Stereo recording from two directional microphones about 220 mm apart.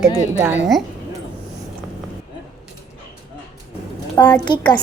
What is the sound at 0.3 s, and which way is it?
Speech, 10° right (ahead or behind).